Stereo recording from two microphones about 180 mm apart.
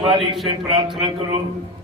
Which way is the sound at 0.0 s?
25° right (ahead or behind).